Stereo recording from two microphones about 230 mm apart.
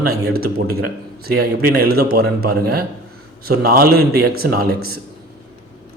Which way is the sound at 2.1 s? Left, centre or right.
Right.